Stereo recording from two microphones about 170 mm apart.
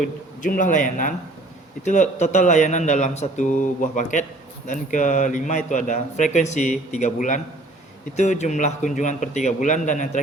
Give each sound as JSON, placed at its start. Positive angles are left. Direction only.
{"t": 0.4, "sound": "speech", "side_deg": 50}